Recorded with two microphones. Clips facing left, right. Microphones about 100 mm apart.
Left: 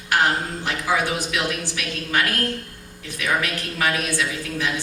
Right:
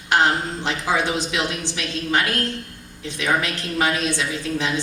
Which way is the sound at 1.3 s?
25° right (ahead or behind).